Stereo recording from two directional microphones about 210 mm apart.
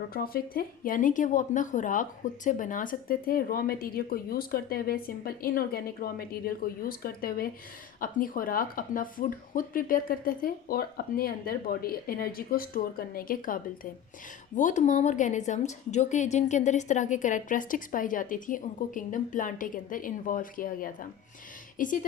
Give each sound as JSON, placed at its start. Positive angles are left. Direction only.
{"t": 0.1, "sound": "a woman's voice", "side_deg": 45}